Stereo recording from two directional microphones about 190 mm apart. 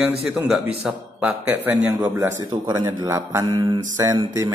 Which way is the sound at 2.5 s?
25° right (ahead or behind).